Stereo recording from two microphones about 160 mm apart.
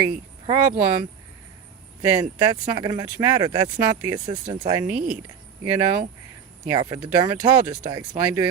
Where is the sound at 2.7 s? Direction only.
25° right (ahead or behind).